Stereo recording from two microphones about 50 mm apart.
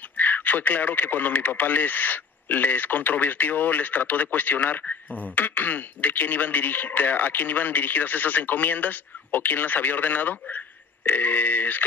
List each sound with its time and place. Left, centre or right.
0.2 s speech: left